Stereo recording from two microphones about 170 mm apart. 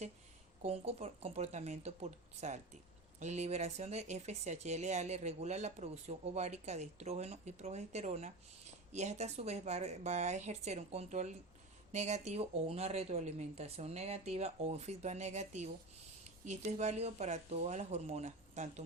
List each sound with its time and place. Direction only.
0.6 s speech: 35° right (ahead or behind)